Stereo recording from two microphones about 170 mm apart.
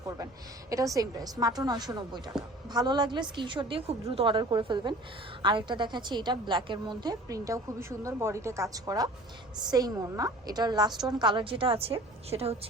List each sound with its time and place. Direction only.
0.7 s a woman's voice: 20° right (ahead or behind); by 12.5 s 35° right (ahead or behind)